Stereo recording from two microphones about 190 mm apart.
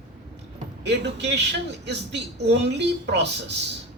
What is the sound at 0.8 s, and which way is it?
A man's voice, 65° right (ahead or behind).